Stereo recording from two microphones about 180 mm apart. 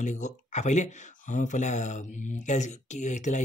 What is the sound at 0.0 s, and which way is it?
Speech, 40° left (ahead or behind).